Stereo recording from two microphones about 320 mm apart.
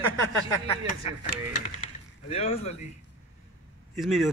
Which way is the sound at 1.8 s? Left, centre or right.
Centre.